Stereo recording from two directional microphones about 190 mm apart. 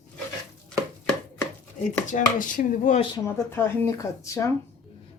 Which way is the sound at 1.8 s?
40° left (ahead or behind).